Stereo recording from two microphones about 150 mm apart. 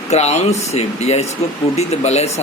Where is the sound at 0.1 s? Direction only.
45° left (ahead or behind).